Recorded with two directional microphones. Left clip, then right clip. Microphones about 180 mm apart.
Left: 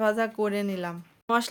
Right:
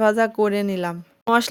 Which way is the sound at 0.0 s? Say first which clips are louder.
Right 7 dB; 35° right (ahead or behind).